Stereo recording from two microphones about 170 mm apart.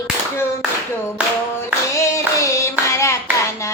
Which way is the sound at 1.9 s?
20° left (ahead or behind).